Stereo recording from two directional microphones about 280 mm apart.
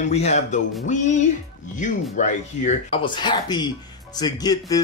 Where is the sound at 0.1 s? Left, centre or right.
Left.